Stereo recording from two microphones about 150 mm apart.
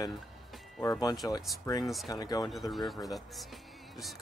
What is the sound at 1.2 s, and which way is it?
Speech, 25° left (ahead or behind).